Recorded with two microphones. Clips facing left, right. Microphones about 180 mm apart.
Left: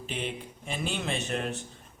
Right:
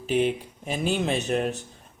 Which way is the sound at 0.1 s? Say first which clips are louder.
Right 12 dB; 40° right (ahead or behind).